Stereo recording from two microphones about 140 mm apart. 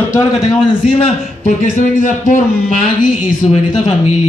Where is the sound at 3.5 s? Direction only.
50° left (ahead or behind).